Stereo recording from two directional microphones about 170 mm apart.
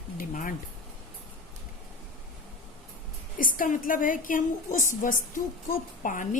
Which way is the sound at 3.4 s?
50° left (ahead or behind).